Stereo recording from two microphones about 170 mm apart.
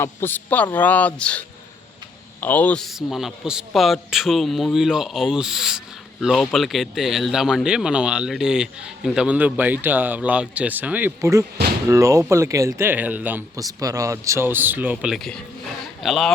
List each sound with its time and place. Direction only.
0.0 s a man's voice: 15° left (ahead or behind)